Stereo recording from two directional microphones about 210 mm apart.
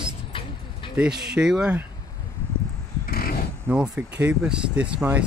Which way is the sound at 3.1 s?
45° left (ahead or behind).